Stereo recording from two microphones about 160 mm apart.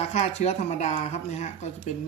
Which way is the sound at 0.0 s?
40° left (ahead or behind).